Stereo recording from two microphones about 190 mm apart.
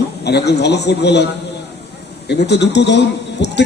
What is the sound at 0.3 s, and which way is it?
A man's voice, 60° left (ahead or behind).